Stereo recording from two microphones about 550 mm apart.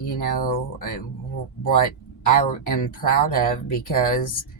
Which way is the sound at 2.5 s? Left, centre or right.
Left.